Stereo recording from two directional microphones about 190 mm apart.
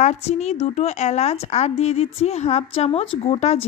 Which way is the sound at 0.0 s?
35° left (ahead or behind).